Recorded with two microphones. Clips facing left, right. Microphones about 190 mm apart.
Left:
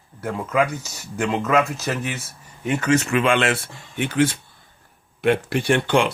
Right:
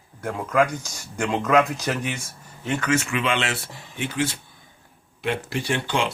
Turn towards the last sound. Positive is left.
turn(degrees=55)  # may be behind; listen again after turning